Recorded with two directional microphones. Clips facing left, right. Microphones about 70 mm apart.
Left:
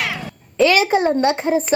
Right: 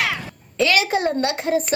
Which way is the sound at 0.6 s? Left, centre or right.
Left.